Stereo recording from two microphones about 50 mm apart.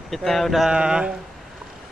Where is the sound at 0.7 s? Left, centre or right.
Centre.